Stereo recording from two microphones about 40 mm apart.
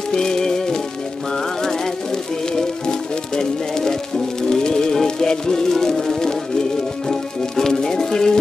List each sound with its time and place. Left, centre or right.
0.1 s music: centre